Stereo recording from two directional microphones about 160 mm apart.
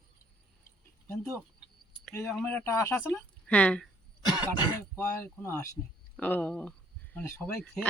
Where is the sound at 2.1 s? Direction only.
5° left (ahead or behind).